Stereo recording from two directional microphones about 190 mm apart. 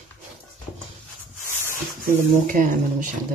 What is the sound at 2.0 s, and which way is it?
Speech, 45° right (ahead or behind).